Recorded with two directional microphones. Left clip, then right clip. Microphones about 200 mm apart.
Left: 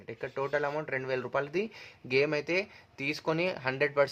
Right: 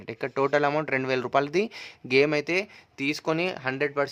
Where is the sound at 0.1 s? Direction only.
45° right (ahead or behind).